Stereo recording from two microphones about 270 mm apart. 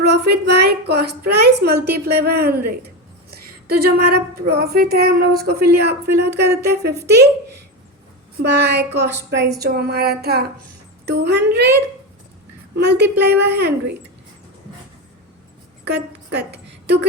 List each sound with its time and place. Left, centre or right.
0.0 s a woman's voice: right
4.0 s a woman's voice: right
8.4 s a woman's voice: right
12.7 s a woman's voice: right
15.8 s a sound: right